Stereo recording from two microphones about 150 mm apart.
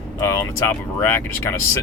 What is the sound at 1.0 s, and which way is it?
Speech, 15° left (ahead or behind).